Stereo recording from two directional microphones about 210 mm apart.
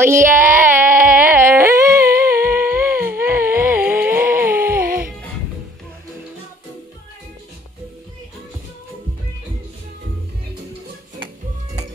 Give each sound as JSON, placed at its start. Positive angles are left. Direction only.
{"t": 0.0, "sound": "speech", "side_deg": -10}
{"t": 0.7, "sound": "music", "side_deg": -10}
{"t": 4.8, "sound": "music", "side_deg": -45}